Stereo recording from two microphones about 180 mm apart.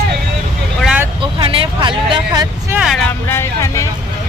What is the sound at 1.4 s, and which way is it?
Vehicle, 30° right (ahead or behind).